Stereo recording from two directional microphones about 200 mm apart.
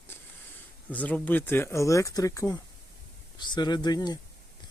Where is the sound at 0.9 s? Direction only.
10° left (ahead or behind).